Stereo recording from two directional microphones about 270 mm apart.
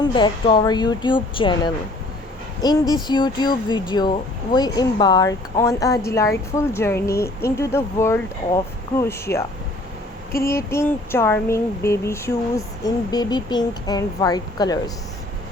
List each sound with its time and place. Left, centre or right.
0.0 s speech: centre
10.4 s speech: centre